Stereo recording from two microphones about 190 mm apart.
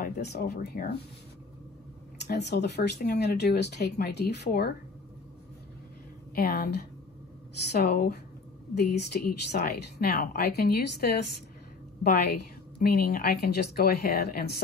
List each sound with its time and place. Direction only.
0.0 s speech: 60° left (ahead or behind)
2.1 s speech: 60° left (ahead or behind)
6.3 s a woman's voice: 55° left (ahead or behind)